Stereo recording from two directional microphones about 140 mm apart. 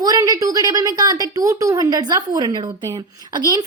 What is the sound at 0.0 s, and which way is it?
Speech, 25° right (ahead or behind).